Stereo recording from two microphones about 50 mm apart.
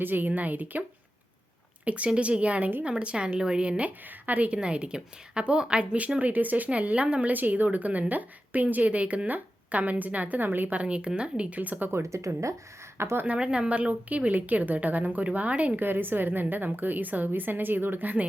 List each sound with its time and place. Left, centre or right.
0.0 s speech: right
10.8 s speech: right
11.9 s speech: right
13.0 s speech: right
13.2 s speech: right
15.8 s speech: right